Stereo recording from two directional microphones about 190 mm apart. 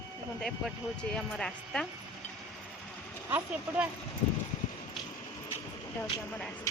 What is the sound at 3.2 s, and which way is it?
Speech, 10° right (ahead or behind).